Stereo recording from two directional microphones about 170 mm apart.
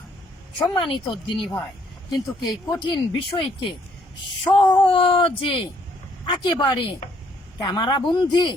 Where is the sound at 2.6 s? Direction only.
25° left (ahead or behind).